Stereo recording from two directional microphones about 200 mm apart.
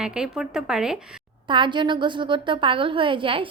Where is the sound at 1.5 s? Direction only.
25° right (ahead or behind).